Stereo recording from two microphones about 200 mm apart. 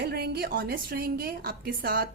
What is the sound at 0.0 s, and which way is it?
A woman's voice, 50° right (ahead or behind).